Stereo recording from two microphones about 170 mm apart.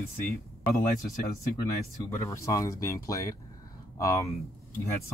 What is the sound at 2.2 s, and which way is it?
Speech, 15° left (ahead or behind).